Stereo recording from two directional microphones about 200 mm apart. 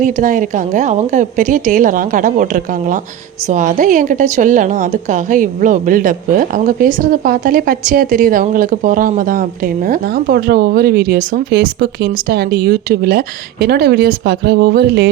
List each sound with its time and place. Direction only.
0.0 s a woman's voice: 40° right (ahead or behind)